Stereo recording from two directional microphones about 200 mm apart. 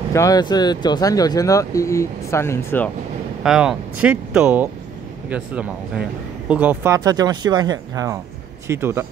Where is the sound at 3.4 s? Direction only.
5° right (ahead or behind).